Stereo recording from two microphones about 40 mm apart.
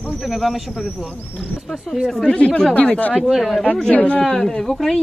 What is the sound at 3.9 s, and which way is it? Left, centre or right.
Speech, left.